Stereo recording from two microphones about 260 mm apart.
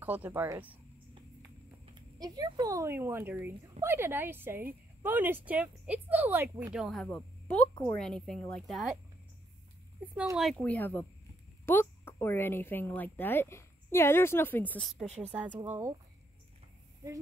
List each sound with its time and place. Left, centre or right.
0.0 s speech: centre
2.0 s a woman's voice: centre
10.1 s a woman's voice: centre
15.0 s speech: right
15.3 s speech: centre